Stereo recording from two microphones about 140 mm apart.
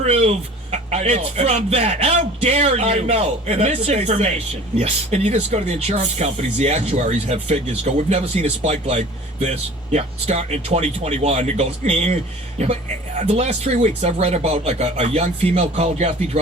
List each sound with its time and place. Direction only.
0.0 s speech: 50° right (ahead or behind)
13.1 s speech: 55° right (ahead or behind)